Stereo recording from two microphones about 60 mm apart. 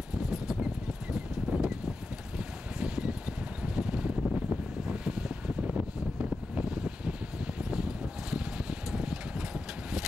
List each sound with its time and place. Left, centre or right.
0.3 s a sound: centre
1.1 s clip-clop: centre
2.3 s vehicle: centre
4.2 s wind: centre
4.8 s wind noise: centre
6.5 s a sound: centre